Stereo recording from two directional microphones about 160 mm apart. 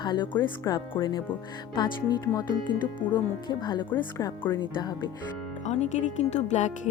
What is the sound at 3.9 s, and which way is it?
Speech, 15° left (ahead or behind).